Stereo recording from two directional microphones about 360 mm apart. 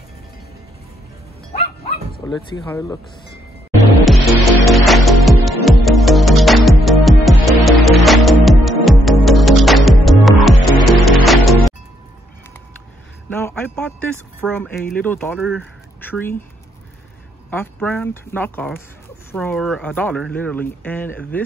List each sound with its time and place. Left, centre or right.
1.6 s bow-wow: centre
2.5 s speech: centre
4.0 s music: centre
13.3 s speech: centre
17.5 s speech: centre